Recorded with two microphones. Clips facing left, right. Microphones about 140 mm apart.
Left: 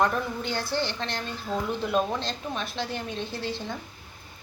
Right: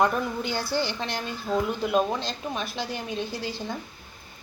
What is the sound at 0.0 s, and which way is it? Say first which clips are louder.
A woman's voice: right 2 dB; 5° right (ahead or behind).